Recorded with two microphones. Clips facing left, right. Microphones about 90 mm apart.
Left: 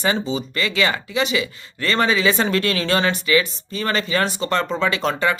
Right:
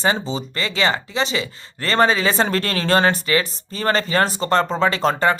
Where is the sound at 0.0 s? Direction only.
35° right (ahead or behind).